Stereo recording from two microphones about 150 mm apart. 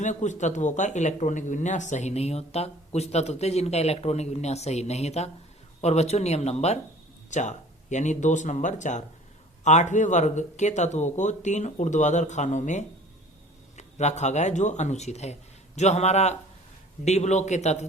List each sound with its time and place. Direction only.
0.0 s speech: 55° left (ahead or behind)